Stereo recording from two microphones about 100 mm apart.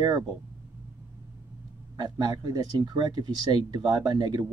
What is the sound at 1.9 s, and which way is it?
Speech, 45° right (ahead or behind).